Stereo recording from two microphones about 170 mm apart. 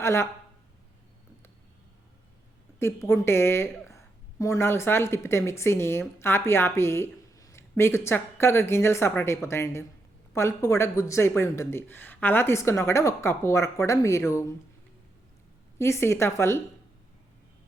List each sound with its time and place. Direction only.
0.0 s speech: 15° left (ahead or behind)
2.7 s a woman's voice: 15° left (ahead or behind)
15.8 s a woman's voice: 15° left (ahead or behind)